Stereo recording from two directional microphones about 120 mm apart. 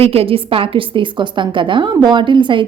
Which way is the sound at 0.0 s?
55° right (ahead or behind).